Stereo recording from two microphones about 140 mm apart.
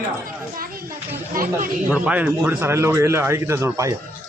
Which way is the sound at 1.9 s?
10° right (ahead or behind).